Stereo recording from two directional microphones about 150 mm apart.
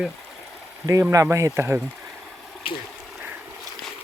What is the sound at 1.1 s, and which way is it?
Speech, 20° right (ahead or behind).